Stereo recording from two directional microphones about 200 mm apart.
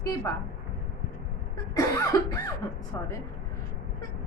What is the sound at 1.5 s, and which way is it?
Cough, 15° left (ahead or behind).